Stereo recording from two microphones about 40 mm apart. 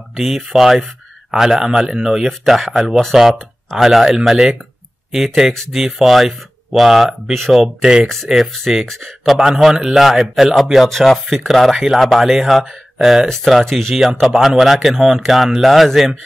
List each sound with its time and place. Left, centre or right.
0.1 s speech: centre
5.5 s speech: centre
6.0 s a man's voice: centre
7.6 s speech: centre
8.5 s a man's voice: centre
9.2 s a man's voice: centre